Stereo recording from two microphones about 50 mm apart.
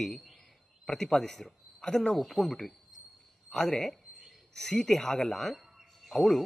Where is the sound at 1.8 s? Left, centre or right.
Centre.